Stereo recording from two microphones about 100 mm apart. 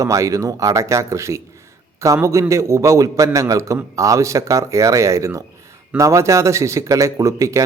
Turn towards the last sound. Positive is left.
turn(degrees=-35)  # may be behind; listen again after turning